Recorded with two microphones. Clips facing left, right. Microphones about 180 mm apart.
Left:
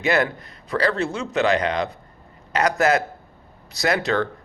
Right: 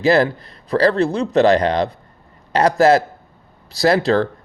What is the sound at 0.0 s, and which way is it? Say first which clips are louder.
A man's voice: right 6 dB; 30° right (ahead or behind).